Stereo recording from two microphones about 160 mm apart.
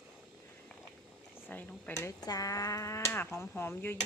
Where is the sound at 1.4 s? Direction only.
10° left (ahead or behind).